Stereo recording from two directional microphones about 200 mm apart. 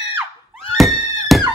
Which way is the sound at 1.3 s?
Centre (ahead or behind).